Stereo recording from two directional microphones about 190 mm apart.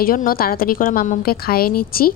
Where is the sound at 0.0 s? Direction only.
50° left (ahead or behind).